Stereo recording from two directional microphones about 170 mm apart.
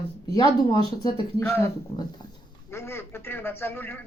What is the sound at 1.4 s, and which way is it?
Speech, 10° left (ahead or behind).